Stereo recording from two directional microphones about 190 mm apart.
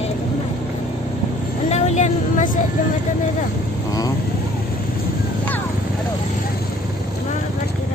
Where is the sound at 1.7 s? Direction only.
35° left (ahead or behind).